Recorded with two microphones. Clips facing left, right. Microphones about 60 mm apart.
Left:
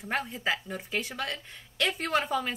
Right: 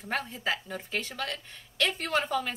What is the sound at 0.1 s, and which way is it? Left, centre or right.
A woman's voice, left.